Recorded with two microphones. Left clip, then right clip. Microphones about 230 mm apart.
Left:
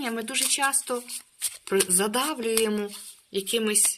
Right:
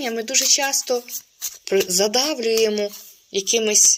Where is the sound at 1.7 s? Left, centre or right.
Left.